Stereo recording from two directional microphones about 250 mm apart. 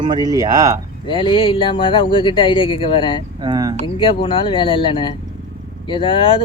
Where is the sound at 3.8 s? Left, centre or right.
Left.